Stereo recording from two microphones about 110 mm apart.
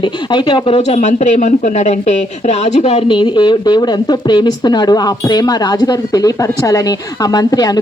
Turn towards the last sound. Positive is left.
turn(degrees=35)  # may be behind; listen again after turning